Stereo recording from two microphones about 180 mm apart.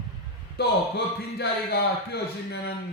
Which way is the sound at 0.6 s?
65° left (ahead or behind).